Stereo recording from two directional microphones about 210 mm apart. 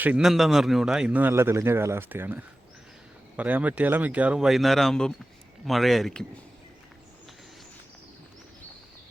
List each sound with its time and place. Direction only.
0.0 s a man's voice: 5° right (ahead or behind)